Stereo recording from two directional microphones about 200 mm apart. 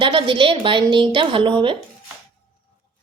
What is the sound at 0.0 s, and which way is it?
A woman's voice, 25° right (ahead or behind).